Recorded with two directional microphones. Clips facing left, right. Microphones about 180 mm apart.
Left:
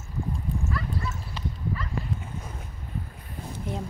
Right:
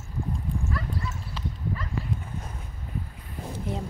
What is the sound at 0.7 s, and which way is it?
Dog, 30° right (ahead or behind).